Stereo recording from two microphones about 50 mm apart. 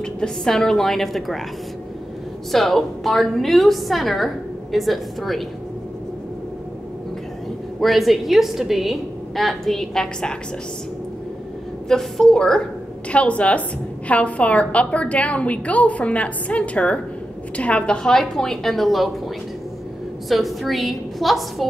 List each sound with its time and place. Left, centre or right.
0.0 s a woman's voice: centre
2.5 s a woman's voice: centre
7.8 s a woman's voice: centre
11.9 s a woman's voice: centre
13.1 s a woman's voice: left; by 21.6 s centre